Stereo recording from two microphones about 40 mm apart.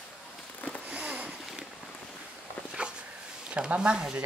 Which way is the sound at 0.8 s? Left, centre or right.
Right.